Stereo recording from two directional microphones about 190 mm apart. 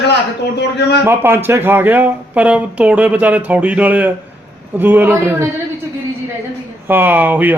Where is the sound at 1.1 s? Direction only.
10° right (ahead or behind).